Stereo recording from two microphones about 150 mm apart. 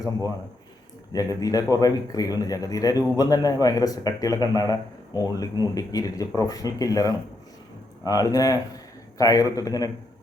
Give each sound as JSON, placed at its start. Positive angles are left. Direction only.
{"t": 1.1, "sound": "a man's voice", "side_deg": 25}